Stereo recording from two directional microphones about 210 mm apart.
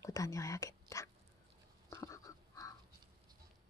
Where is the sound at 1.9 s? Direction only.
15° left (ahead or behind).